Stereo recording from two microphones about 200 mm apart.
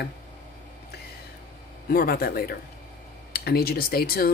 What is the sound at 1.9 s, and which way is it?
Speech, 50° left (ahead or behind).